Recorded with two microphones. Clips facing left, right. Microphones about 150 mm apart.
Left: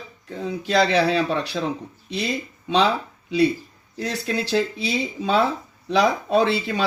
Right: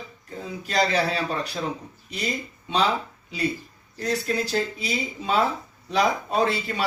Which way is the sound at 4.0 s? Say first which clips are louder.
Even; 85° left.